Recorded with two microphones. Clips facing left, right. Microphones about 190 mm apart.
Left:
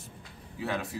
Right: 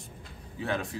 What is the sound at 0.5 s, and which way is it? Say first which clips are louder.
Speech: right 1 dB; 5° left (ahead or behind).